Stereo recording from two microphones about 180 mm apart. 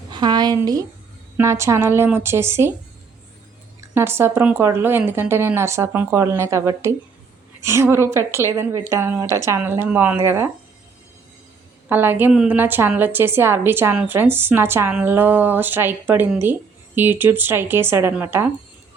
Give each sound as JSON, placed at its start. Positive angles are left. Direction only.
{"t": 0.1, "sound": "a woman's voice", "side_deg": -25}
{"t": 3.8, "sound": "a woman's voice", "side_deg": -15}
{"t": 11.9, "sound": "a woman's voice", "side_deg": -10}